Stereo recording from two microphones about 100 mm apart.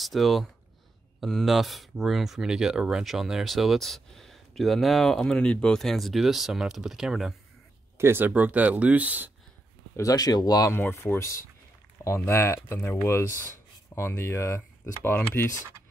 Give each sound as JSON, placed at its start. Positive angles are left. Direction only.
{"t": 0.0, "sound": "speech", "side_deg": 0}
{"t": 8.0, "sound": "speech", "side_deg": -25}
{"t": 9.9, "sound": "speech", "side_deg": 35}
{"t": 10.7, "sound": "speech", "side_deg": 25}
{"t": 15.1, "sound": "speech", "side_deg": 15}